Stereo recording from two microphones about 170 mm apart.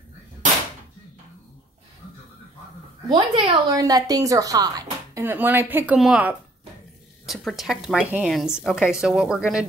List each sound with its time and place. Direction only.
3.1 s a woman's voice: 25° right (ahead or behind); by 9.7 s 5° right (ahead or behind)